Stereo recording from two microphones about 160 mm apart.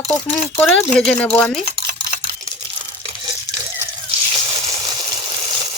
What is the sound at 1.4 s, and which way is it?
Speech, 10° left (ahead or behind).